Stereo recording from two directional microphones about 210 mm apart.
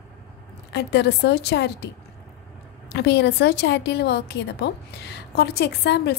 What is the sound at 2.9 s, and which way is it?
A woman's voice, 55° left (ahead or behind).